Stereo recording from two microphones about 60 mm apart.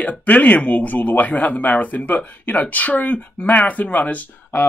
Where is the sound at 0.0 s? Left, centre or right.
Left.